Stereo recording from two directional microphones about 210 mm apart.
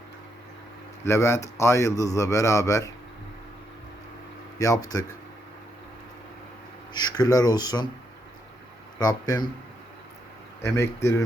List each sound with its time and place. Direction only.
1.0 s a man's voice: 10° left (ahead or behind)
4.5 s a man's voice: 15° left (ahead or behind)
6.9 s speech: 20° left (ahead or behind)
9.0 s a man's voice: 15° left (ahead or behind)
10.6 s a man's voice: 10° left (ahead or behind)